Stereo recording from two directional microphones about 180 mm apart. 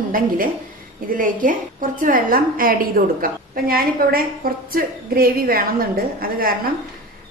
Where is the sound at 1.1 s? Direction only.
50° right (ahead or behind).